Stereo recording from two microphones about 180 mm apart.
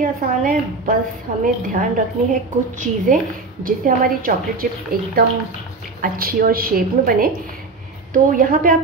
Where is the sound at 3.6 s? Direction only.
50° right (ahead or behind).